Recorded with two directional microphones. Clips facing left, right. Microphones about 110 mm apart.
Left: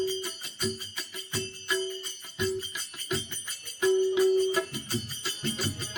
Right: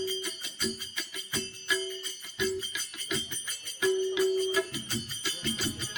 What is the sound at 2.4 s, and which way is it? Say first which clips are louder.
Music: left 1 dB; 40° left (ahead or behind).